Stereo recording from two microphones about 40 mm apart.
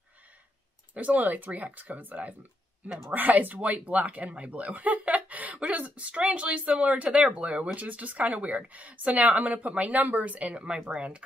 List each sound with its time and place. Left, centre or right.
0.9 s speech: right